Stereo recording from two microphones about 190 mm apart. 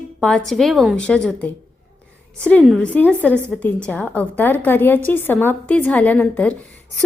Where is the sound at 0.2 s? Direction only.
5° left (ahead or behind).